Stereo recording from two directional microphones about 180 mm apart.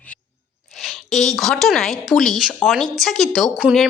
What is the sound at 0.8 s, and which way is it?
Speech, centre (ahead or behind).